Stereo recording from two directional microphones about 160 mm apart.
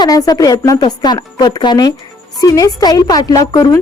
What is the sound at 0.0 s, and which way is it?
Speech, 25° left (ahead or behind).